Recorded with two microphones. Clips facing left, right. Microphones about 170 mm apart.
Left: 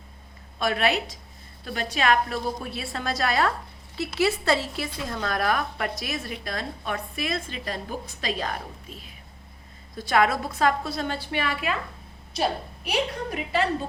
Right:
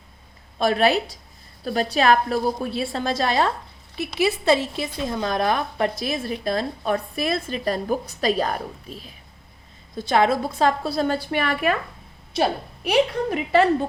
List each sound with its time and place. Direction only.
0.6 s a woman's voice: 35° right (ahead or behind)
3.9 s speech: 15° right (ahead or behind); by 9.0 s 35° right (ahead or behind)
9.9 s speech: 25° right (ahead or behind); by 11.8 s 50° right (ahead or behind)
12.3 s a woman's voice: 65° right (ahead or behind)